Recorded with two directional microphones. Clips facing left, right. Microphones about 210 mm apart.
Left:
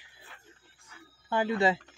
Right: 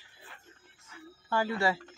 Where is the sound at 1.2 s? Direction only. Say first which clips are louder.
Left 3 dB; 20° left (ahead or behind).